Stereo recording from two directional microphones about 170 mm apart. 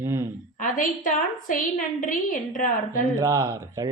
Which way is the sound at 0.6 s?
50° left (ahead or behind).